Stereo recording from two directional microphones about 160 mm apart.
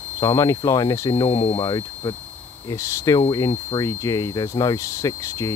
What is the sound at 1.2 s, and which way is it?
Speech, 35° left (ahead or behind).